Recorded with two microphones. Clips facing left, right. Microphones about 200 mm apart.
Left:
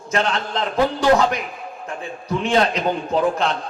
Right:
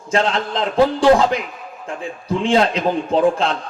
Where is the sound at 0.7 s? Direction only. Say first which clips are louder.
Right 4 dB; 30° right (ahead or behind).